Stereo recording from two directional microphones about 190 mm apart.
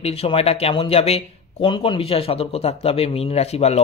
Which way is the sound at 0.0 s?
30° left (ahead or behind).